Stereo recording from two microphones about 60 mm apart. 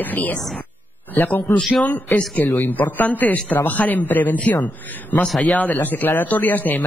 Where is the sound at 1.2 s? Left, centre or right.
Left.